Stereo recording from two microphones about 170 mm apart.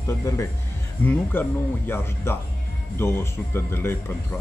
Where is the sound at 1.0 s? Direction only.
10° left (ahead or behind).